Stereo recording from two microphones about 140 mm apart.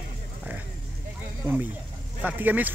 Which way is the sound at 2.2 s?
10° right (ahead or behind).